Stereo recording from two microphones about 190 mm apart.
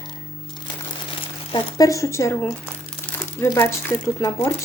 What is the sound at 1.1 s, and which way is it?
Speech, 20° left (ahead or behind).